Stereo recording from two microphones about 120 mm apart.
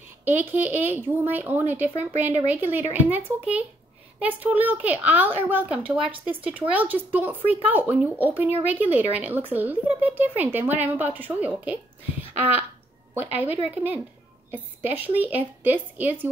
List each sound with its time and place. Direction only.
0.2 s a child's voice: 15° right (ahead or behind)
13.3 s a child's voice: 15° right (ahead or behind)